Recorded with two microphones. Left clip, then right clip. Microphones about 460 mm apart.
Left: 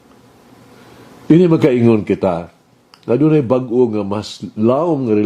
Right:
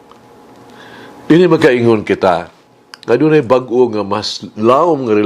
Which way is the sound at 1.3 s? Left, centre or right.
Right.